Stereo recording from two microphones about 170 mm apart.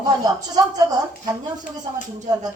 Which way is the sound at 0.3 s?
25° right (ahead or behind).